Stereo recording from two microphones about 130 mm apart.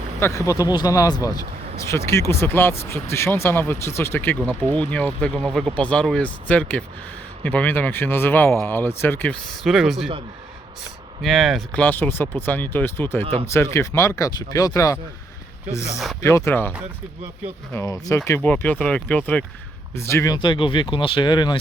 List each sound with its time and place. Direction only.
0.2 s speech: 20° left (ahead or behind)
9.6 s speech: centre (ahead or behind)
11.2 s speech: centre (ahead or behind)
11.8 s speech: 15° left (ahead or behind)
13.2 s speech: 50° right (ahead or behind)
13.7 s speech: 20° left (ahead or behind)
16.2 s speech: 20° left (ahead or behind)
17.7 s speech: 25° left (ahead or behind)
18.3 s speech: 15° left (ahead or behind)
20.3 s speech: 35° left (ahead or behind)